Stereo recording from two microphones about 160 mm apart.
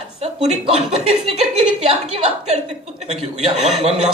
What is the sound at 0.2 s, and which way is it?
A man's voice, 45° right (ahead or behind).